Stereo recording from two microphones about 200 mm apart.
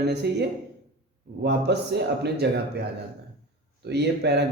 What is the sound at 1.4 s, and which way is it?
A man's voice, 55° right (ahead or behind).